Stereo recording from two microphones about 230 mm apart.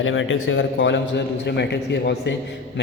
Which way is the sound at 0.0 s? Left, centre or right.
Left.